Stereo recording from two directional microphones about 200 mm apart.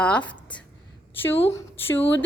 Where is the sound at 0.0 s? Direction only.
5° left (ahead or behind).